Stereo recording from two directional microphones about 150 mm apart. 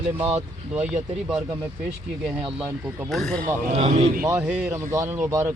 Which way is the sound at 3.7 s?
45° right (ahead or behind).